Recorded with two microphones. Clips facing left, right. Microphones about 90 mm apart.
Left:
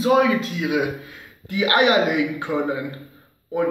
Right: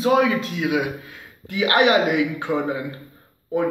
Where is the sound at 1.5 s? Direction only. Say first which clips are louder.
Even; 15° left (ahead or behind).